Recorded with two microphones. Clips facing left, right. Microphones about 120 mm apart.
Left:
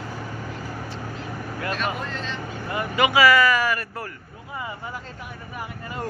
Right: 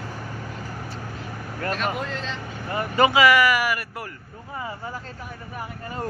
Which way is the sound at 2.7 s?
35° right (ahead or behind).